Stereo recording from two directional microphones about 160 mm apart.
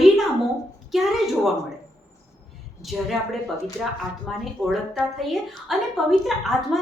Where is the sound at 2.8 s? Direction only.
20° left (ahead or behind).